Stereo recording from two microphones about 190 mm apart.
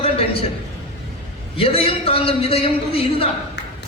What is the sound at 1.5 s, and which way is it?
A man's voice, 30° left (ahead or behind).